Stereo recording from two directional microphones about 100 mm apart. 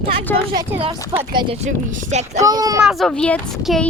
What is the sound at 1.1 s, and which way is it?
Speech, 90° right.